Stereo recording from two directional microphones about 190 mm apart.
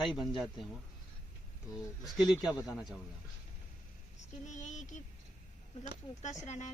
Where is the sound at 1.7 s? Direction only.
20° left (ahead or behind).